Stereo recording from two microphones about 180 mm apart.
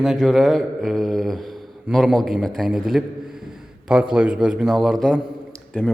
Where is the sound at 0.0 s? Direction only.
Centre (ahead or behind).